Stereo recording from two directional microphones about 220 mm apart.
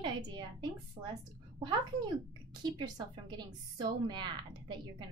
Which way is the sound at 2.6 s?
20° right (ahead or behind).